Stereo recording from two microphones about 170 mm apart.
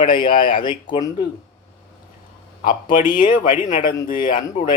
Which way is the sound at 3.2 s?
50° left (ahead or behind).